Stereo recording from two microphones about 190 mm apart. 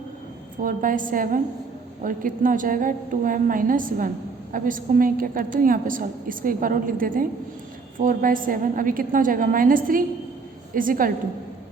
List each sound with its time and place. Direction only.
0.6 s a woman's voice: 45° right (ahead or behind)